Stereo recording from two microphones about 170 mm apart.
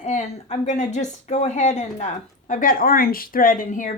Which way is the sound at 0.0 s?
40° left (ahead or behind).